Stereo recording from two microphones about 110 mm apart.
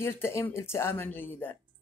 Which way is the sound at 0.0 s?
20° left (ahead or behind).